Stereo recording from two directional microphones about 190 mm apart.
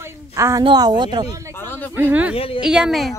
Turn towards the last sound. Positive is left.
turn(degrees=0)  # may be behind; listen again after turning